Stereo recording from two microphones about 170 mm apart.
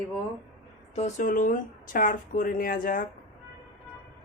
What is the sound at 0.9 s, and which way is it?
Speech, 45° left (ahead or behind).